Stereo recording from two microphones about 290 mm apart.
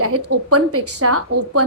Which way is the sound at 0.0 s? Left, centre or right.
Right.